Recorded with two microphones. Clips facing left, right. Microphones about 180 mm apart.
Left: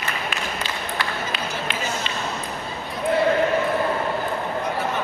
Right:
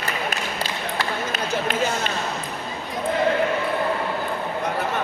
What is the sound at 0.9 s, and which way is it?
Run, 45° right (ahead or behind).